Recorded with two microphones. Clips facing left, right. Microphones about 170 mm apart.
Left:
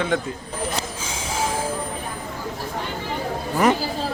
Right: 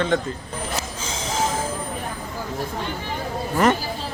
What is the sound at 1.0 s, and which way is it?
Snort, 10° left (ahead or behind).